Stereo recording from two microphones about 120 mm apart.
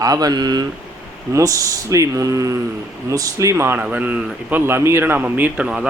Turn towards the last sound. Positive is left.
turn(degrees=-5)  # may be behind; listen again after turning